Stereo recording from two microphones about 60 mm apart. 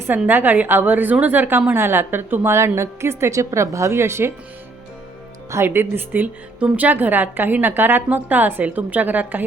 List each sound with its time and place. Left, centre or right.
0.3 s a woman's voice: right
5.5 s a woman's voice: right